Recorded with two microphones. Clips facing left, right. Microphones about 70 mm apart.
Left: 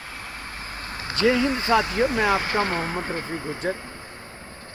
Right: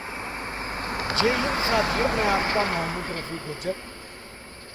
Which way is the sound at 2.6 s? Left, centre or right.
Centre.